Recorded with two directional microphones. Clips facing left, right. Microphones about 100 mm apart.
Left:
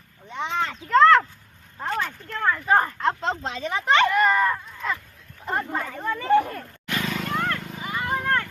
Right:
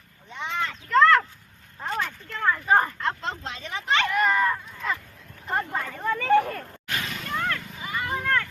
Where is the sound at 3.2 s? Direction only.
45° left (ahead or behind).